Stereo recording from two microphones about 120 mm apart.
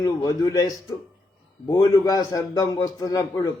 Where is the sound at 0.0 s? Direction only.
30° left (ahead or behind).